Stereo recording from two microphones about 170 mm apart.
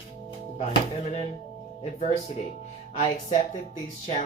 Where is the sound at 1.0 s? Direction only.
40° left (ahead or behind).